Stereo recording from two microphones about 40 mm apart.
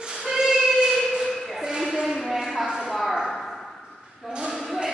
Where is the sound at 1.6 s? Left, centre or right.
Centre.